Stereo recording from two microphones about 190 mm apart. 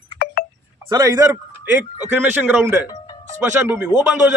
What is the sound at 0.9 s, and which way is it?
A man's voice, 20° right (ahead or behind).